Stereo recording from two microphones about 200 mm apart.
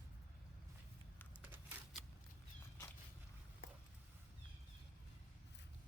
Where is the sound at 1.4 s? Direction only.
5° right (ahead or behind).